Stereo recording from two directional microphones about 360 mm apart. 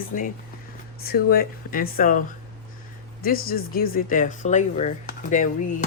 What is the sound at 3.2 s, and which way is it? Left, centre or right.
Speech, left.